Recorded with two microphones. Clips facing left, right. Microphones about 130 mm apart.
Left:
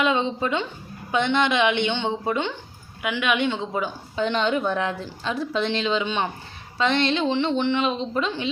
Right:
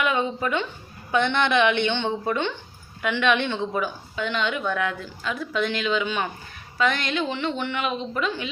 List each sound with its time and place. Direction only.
0.0 s a woman's voice: 20° left (ahead or behind)
4.2 s a woman's voice: 35° left (ahead or behind)